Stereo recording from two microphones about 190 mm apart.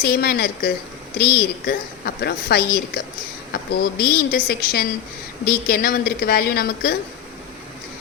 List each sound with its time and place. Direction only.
0.0 s a woman's voice: 55° left (ahead or behind)